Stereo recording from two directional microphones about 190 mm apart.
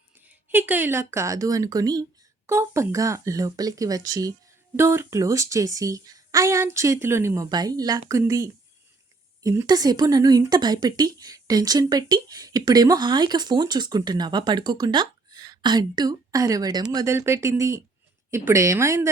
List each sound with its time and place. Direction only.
0.5 s a woman's voice: 10° right (ahead or behind)